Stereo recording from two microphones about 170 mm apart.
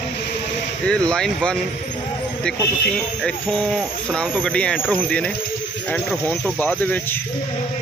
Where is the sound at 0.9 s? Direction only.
5° left (ahead or behind).